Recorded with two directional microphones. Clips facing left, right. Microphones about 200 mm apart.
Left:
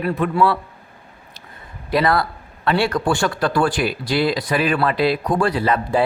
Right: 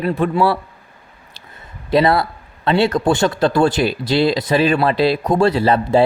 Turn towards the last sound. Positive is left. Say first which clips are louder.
# right 4 dB
turn(degrees=-25)  # may be behind; listen again after turning